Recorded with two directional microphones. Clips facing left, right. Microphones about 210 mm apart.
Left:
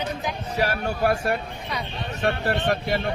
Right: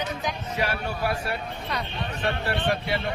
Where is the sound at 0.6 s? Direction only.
45° left (ahead or behind).